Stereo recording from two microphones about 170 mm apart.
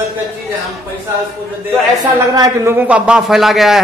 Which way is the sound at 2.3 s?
20° right (ahead or behind).